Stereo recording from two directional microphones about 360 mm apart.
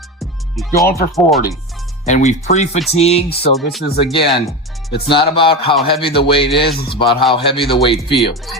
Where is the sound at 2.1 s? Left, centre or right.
Centre.